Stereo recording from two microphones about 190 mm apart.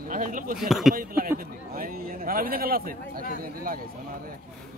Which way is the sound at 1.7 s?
50° right (ahead or behind).